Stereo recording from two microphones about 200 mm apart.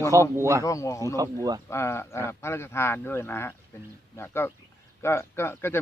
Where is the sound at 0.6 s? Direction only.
15° left (ahead or behind).